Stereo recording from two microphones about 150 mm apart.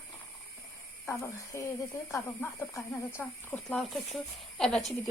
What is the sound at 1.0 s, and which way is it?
Speech, 20° left (ahead or behind).